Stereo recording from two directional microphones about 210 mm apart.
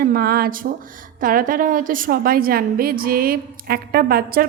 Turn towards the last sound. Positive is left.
turn(degrees=-45)  # may be behind; listen again after turning